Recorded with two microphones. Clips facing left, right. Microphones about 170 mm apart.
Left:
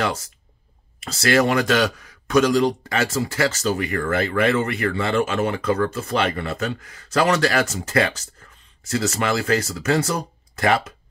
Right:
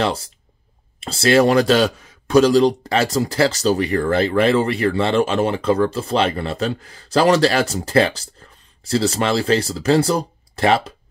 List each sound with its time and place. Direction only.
0.0 s speech: 30° right (ahead or behind)